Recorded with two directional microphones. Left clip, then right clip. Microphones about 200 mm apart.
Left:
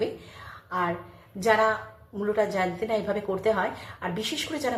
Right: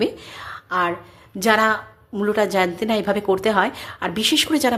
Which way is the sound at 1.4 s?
60° right (ahead or behind).